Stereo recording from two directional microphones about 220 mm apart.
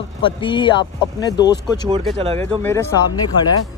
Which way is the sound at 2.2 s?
25° right (ahead or behind).